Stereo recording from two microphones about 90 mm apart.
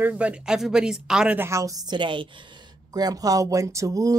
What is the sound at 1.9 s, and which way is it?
Speech, 65° right (ahead or behind).